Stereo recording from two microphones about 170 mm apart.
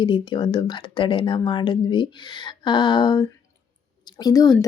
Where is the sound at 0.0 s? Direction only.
25° left (ahead or behind).